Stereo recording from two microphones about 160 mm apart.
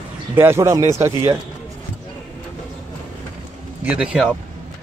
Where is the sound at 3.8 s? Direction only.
5° right (ahead or behind).